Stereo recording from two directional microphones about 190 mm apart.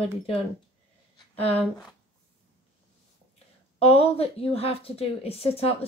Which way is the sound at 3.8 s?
30° left (ahead or behind).